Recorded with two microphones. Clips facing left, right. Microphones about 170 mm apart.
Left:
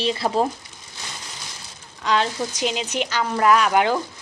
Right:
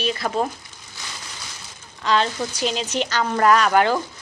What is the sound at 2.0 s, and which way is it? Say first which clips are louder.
A woman's voice: right 1 dB; 10° left (ahead or behind).